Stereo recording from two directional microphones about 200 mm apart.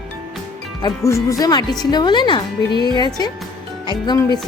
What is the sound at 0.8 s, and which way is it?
Speech, 15° left (ahead or behind).